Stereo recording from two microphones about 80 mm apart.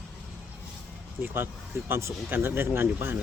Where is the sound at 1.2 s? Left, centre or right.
Right.